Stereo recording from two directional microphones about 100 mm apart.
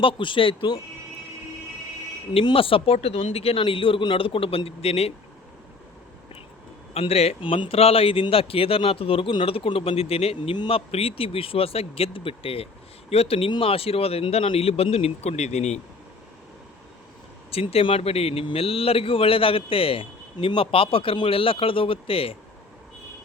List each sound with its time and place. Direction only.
0.0 s speech: 60° left (ahead or behind)
2.3 s a man's voice: 60° left (ahead or behind); by 5.1 s 90° left
7.1 s a man's voice: 90° left
10.5 s a man's voice: 60° left (ahead or behind)
13.1 s a man's voice: 85° left
17.5 s a man's voice: 80° left